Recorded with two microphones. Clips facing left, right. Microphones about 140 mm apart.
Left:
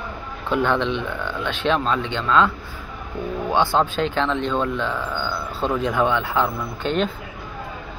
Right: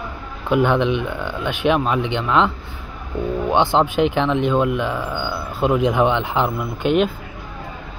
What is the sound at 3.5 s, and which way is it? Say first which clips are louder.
Speech: right 2 dB; 20° right (ahead or behind).